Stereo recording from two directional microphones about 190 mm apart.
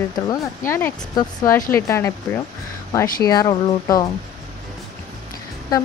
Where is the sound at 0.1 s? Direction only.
15° left (ahead or behind).